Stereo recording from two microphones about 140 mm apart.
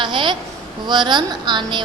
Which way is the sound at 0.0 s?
35° right (ahead or behind).